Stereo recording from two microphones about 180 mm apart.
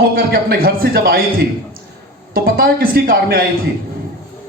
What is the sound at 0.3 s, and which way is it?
Speech, 55° right (ahead or behind).